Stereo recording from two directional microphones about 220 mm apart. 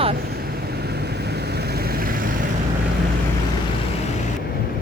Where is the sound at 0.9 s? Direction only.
50° right (ahead or behind).